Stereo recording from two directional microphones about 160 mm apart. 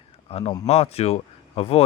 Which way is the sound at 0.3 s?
40° left (ahead or behind).